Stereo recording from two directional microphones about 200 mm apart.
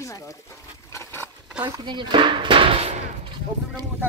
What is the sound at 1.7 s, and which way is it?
Speech, 20° right (ahead or behind).